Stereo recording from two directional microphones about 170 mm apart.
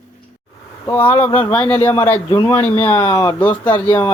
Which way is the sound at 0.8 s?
15° left (ahead or behind).